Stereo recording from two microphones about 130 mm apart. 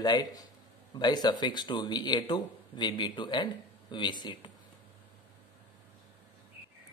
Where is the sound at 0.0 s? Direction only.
30° left (ahead or behind).